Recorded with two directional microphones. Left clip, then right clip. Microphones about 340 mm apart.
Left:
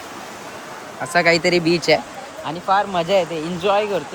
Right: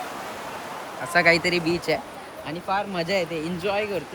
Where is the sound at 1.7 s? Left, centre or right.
Left.